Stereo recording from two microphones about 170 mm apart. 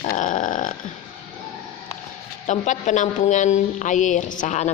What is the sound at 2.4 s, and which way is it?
A woman's voice, 45° left (ahead or behind).